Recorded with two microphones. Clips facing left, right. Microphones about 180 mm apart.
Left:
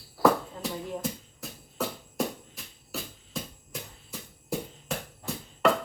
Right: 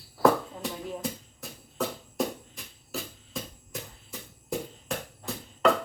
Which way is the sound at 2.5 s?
Centre (ahead or behind).